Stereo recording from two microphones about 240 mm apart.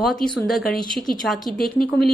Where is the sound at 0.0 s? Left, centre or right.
Centre.